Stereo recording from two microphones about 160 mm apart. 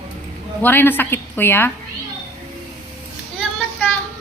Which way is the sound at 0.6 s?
15° left (ahead or behind).